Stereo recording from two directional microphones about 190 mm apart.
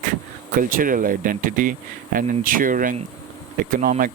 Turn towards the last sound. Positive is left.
turn(degrees=-45)  # may be behind; listen again after turning